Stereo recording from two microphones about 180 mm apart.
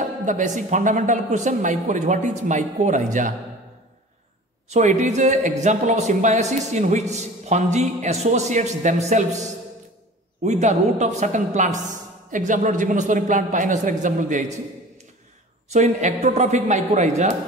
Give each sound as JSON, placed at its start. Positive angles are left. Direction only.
{"t": 0.2, "sound": "a woman's voice", "side_deg": -45}
{"t": 4.6, "sound": "a woman's voice", "side_deg": -40}
{"t": 15.7, "sound": "speech", "side_deg": -40}